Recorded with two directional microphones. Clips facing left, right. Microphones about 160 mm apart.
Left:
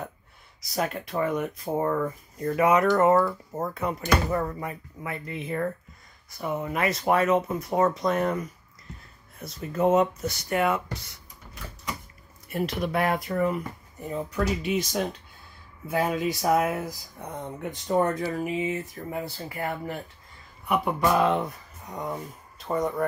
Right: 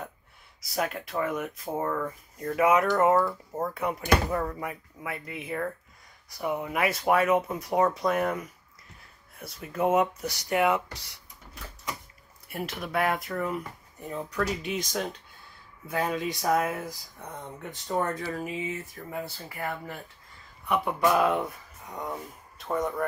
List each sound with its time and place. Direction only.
0.7 s speech: centre (ahead or behind)
1.8 s speech: 10° left (ahead or behind)
2.3 s speech: centre (ahead or behind)
3.2 s speech: 5° left (ahead or behind)
3.6 s speech: 10° right (ahead or behind)
4.3 s speech: 5° left (ahead or behind)
4.6 s speech: 5° right (ahead or behind)
12.4 s speech: 5° right (ahead or behind); by 20.0 s 20° left (ahead or behind)
20.6 s speech: 5° left (ahead or behind)
21.0 s speech: 5° right (ahead or behind)